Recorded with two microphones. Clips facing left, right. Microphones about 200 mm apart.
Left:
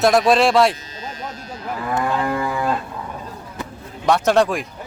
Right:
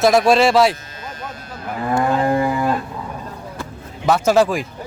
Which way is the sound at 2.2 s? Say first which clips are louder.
Right 5 dB; 35° right (ahead or behind).